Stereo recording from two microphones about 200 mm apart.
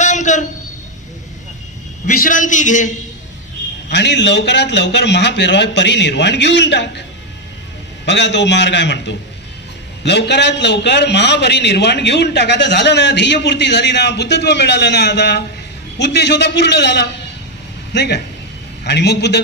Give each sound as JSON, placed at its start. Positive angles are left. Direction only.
{"t": 0.0, "sound": "a sound", "side_deg": 35}
{"t": 2.0, "sound": "a man's voice", "side_deg": 40}
{"t": 3.9, "sound": "a man's voice", "side_deg": 60}
{"t": 8.0, "sound": "a man's voice", "side_deg": 60}